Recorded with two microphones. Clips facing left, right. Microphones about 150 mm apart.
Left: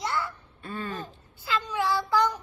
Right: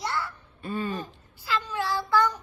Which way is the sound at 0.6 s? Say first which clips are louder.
Right 4 dB; 10° right (ahead or behind).